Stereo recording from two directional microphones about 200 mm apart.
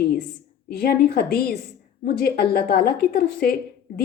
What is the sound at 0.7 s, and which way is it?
A woman's voice, 50° left (ahead or behind).